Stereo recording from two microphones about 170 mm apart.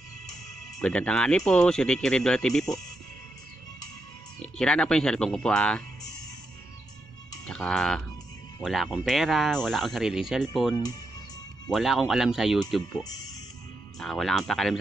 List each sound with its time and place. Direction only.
0.7 s speech: 5° left (ahead or behind)
4.4 s speech: 5° left (ahead or behind)
7.4 s speech: 5° left (ahead or behind)
11.7 s speech: centre (ahead or behind)
13.9 s speech: centre (ahead or behind)